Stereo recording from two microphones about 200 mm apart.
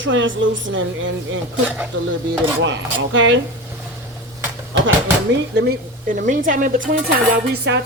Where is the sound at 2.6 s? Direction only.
70° right (ahead or behind).